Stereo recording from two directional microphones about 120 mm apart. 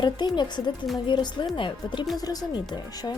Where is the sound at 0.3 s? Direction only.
40° left (ahead or behind).